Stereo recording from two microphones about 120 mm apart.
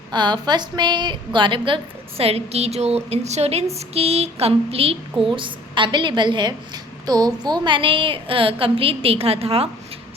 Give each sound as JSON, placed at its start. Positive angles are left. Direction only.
{"t": 0.1, "sound": "a woman's voice", "side_deg": -35}
{"t": 5.2, "sound": "a woman's voice", "side_deg": -45}